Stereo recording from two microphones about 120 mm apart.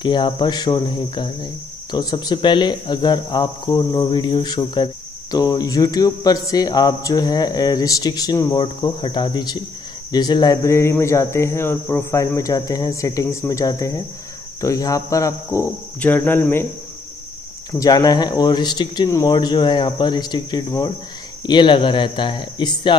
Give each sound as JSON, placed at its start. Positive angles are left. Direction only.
{"t": 0.0, "sound": "speech", "side_deg": 40}
{"t": 10.1, "sound": "cricket", "side_deg": 35}
{"t": 16.0, "sound": "speech", "side_deg": 15}
{"t": 17.7, "sound": "speech", "side_deg": 30}